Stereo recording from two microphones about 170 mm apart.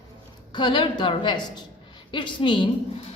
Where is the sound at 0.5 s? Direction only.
30° left (ahead or behind).